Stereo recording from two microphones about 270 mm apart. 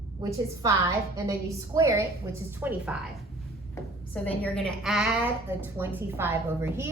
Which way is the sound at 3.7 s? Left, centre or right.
Centre.